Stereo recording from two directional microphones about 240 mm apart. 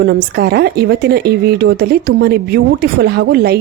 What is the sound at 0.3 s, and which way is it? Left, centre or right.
Speech, right.